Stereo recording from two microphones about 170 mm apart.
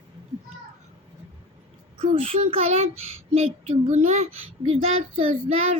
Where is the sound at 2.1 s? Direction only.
35° right (ahead or behind).